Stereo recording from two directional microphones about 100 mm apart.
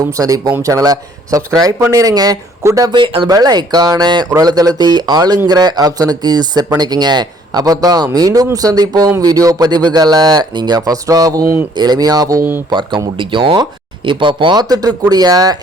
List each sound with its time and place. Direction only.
0.0 s speech: 35° right (ahead or behind)
2.9 s speech: 60° right (ahead or behind)
3.2 s speech: 40° right (ahead or behind)
13.1 s speech: 55° right (ahead or behind); by 15.5 s 40° right (ahead or behind)